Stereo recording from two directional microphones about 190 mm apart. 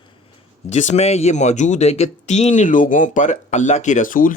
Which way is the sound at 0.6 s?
35° left (ahead or behind).